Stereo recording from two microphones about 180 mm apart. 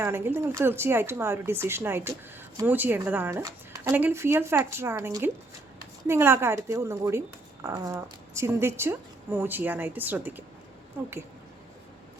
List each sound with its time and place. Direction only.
0.0 s a woman's voice: 15° right (ahead or behind)